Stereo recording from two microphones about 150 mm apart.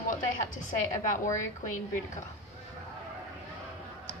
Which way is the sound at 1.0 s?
55° left (ahead or behind).